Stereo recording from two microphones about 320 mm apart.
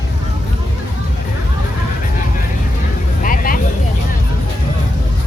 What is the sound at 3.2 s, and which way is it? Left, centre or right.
Vehicle, left.